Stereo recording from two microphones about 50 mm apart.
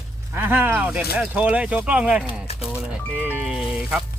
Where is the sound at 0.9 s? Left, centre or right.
Right.